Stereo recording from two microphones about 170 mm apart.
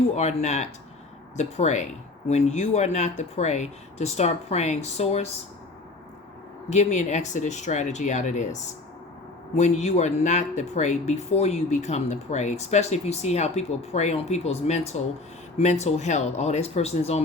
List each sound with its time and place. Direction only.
0.2 s speech: 40° left (ahead or behind)
6.7 s speech: 45° left (ahead or behind)